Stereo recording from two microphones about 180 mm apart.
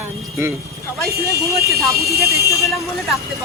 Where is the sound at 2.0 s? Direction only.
15° left (ahead or behind).